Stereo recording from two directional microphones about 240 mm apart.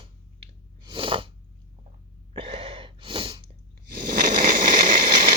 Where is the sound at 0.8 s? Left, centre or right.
Right.